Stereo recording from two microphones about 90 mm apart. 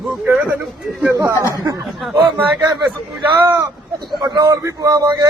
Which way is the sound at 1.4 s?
40° right (ahead or behind).